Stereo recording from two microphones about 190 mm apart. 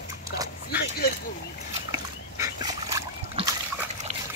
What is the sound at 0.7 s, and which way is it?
Speech, 55° left (ahead or behind).